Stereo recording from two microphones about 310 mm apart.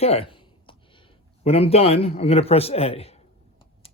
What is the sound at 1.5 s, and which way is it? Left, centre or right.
A man's voice, centre.